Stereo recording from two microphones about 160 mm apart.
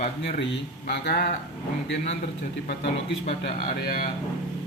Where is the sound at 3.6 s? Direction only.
50° left (ahead or behind).